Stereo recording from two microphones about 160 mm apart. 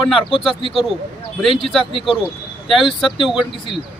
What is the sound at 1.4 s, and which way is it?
Speech, centre (ahead or behind).